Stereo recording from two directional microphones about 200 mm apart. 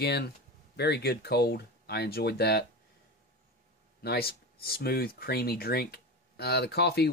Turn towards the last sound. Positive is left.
turn(degrees=55)  # may be behind; listen again after turning